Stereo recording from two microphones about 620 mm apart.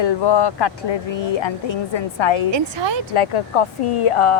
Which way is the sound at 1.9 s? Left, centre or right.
Left.